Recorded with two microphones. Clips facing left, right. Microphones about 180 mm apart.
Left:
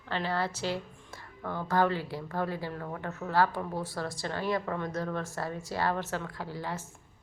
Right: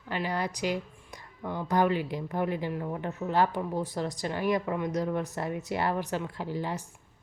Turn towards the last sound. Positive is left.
turn(degrees=-15)  # may be behind; listen again after turning